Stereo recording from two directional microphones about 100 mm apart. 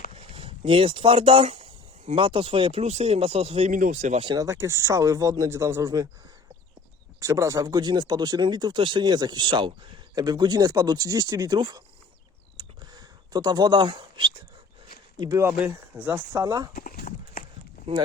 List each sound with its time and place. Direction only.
0.1 s speech: 75° right (ahead or behind)
2.1 s speech: 65° right (ahead or behind); by 3.7 s 90° right
4.4 s speech: 30° right (ahead or behind)
7.2 s speech: 35° right (ahead or behind)
11.5 s speech: 50° right (ahead or behind)
12.5 s a sound: 45° right (ahead or behind)
15.4 s speech: 20° right (ahead or behind)
16.3 s speech: 40° right (ahead or behind)